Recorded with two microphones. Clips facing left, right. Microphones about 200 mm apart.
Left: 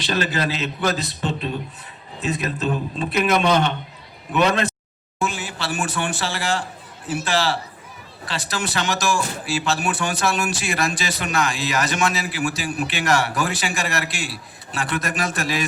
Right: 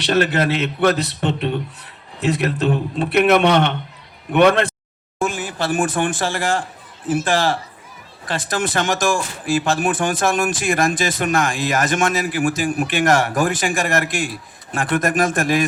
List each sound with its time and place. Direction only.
0.1 s a man's voice: 60° right (ahead or behind)